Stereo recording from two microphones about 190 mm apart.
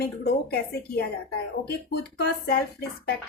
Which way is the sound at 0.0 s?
55° left (ahead or behind).